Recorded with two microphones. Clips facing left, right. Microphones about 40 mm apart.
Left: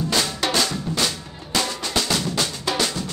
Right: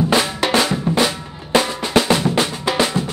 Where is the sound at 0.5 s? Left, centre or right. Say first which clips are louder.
Right 6 dB; right.